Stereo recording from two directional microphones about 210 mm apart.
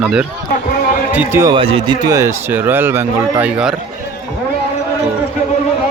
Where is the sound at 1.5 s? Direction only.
25° right (ahead or behind); by 3.7 s 5° right (ahead or behind).